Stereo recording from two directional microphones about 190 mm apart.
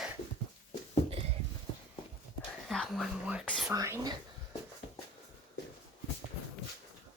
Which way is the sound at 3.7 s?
15° right (ahead or behind).